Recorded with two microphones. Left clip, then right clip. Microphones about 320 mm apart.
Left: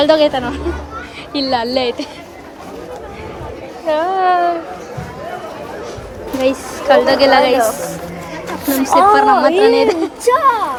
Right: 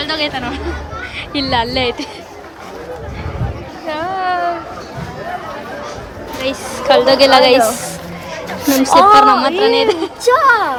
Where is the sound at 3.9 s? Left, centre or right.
Centre.